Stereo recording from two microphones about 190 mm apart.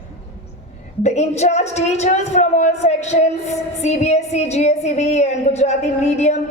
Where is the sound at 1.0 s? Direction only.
35° left (ahead or behind).